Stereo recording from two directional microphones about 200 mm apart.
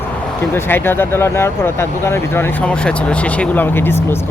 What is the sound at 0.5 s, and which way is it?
Speech, 10° left (ahead or behind).